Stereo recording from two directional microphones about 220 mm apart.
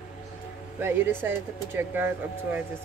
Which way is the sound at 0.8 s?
10° right (ahead or behind).